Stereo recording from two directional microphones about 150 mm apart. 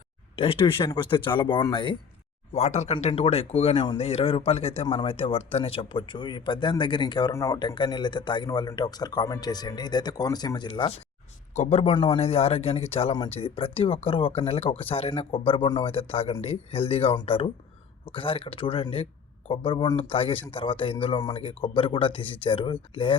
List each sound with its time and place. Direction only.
0.3 s speech: 40° left (ahead or behind)
2.5 s speech: 45° left (ahead or behind); by 10.9 s 30° left (ahead or behind)
11.5 s speech: 45° left (ahead or behind)